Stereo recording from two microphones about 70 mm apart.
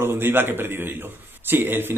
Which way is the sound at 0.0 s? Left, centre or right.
Right.